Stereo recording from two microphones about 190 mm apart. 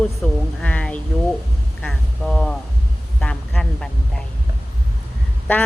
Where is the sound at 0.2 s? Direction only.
5° left (ahead or behind).